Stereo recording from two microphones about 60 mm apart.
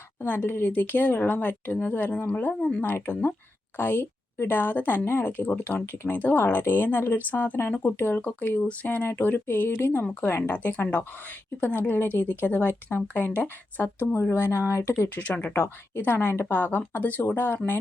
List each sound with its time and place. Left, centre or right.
0.2 s a woman's voice: left; by 2.8 s centre
2.8 s a woman's voice: left
6.1 s a woman's voice: left
15.1 s a woman's voice: left